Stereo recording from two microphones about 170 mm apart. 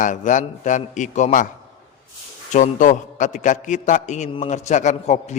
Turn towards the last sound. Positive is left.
turn(degrees=40)  # may be behind; listen again after turning